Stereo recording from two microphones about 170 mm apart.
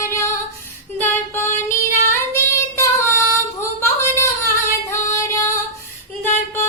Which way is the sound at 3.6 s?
15° left (ahead or behind).